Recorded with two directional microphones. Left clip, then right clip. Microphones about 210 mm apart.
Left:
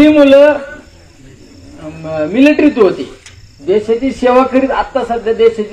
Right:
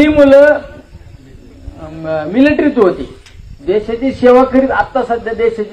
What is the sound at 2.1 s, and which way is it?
Speech, 40° right (ahead or behind).